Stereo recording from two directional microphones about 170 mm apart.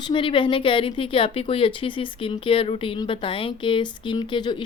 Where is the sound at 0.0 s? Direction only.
30° left (ahead or behind).